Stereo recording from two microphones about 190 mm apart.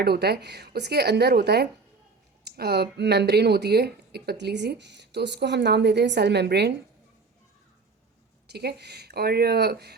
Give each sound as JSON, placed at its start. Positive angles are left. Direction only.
{"t": 0.0, "sound": "speech", "side_deg": -60}
{"t": 8.4, "sound": "speech", "side_deg": -60}